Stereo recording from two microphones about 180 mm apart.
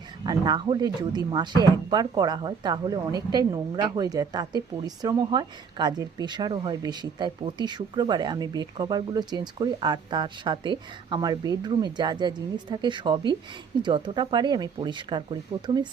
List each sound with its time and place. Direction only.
0.3 s speech: 25° right (ahead or behind)